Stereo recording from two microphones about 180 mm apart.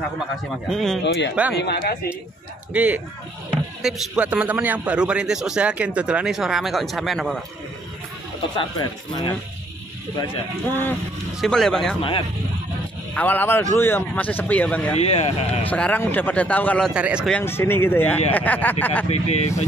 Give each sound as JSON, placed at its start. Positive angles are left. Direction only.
{"t": 0.7, "sound": "a man's voice", "side_deg": 0}
{"t": 1.0, "sound": "speech", "side_deg": 75}
{"t": 2.7, "sound": "a man's voice", "side_deg": -10}
{"t": 8.5, "sound": "speech", "side_deg": 25}
{"t": 10.7, "sound": "a man's voice", "side_deg": 10}
{"t": 13.1, "sound": "a man's voice", "side_deg": 10}
{"t": 15.0, "sound": "speech", "side_deg": 35}
{"t": 15.6, "sound": "a man's voice", "side_deg": 10}
{"t": 16.9, "sound": "a man's voice", "side_deg": -5}
{"t": 17.3, "sound": "a man's voice", "side_deg": 10}
{"t": 19.0, "sound": "speech", "side_deg": 35}